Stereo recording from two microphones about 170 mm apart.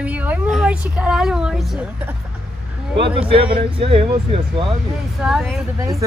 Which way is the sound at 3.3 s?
30° right (ahead or behind).